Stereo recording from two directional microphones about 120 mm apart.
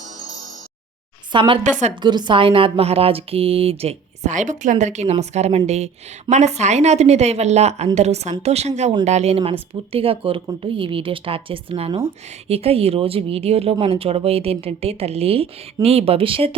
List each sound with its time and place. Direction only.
1.3 s speech: 45° right (ahead or behind)